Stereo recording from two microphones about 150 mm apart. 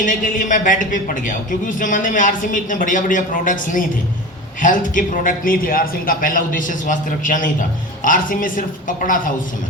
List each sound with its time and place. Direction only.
0.0 s a woman's voice: 60° left (ahead or behind)